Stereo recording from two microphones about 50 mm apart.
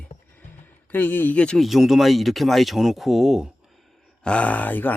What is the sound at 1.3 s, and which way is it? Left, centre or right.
Speech, left.